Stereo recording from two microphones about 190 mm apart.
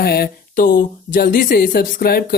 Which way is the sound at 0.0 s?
55° left (ahead or behind).